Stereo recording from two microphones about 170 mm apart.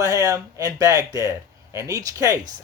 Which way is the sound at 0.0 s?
20° right (ahead or behind).